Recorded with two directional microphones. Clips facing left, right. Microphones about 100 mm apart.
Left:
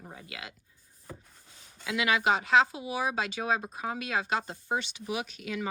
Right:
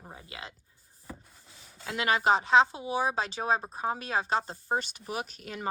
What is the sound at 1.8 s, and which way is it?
Speech, 40° right (ahead or behind).